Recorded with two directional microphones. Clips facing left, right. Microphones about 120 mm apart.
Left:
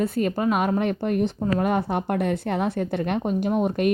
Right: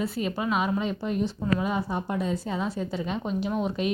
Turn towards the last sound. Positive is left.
turn(degrees=55)  # may be behind; listen again after turning